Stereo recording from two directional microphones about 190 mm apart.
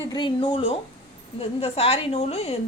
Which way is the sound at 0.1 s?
25° left (ahead or behind).